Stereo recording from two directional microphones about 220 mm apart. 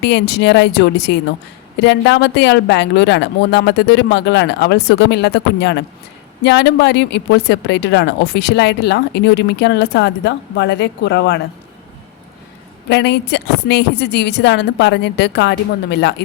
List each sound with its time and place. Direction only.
0.0 s a woman's voice: 50° left (ahead or behind)
12.9 s a woman's voice: 50° left (ahead or behind)